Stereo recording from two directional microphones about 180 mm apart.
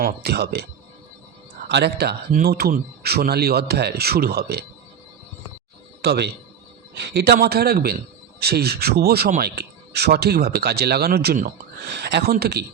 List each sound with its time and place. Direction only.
0.0 s speech: 60° right (ahead or behind)
1.6 s speech: 70° right (ahead or behind)
6.0 s a man's voice: 65° right (ahead or behind)